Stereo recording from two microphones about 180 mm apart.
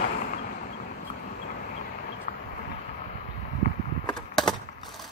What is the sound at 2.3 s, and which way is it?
Vehicle, 50° left (ahead or behind).